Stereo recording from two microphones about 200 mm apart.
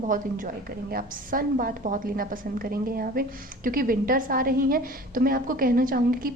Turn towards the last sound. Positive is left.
turn(degrees=-45)  # may be behind; listen again after turning